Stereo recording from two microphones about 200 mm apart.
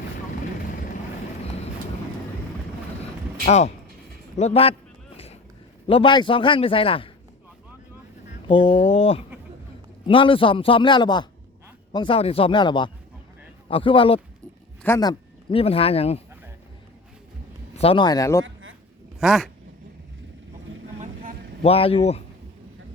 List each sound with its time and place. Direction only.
3.4 s a man's voice: 35° left (ahead or behind)
5.1 s vehicle: 30° left (ahead or behind)
5.9 s a man's voice: 25° left (ahead or behind)
8.4 s a man's voice: 25° left (ahead or behind)
17.7 s a man's voice: 25° left (ahead or behind)
18.4 s a sound: 75° right (ahead or behind)
19.2 s speech: centre (ahead or behind)
21.0 s vehicle: 45° right (ahead or behind)
21.6 s a man's voice: 30° left (ahead or behind)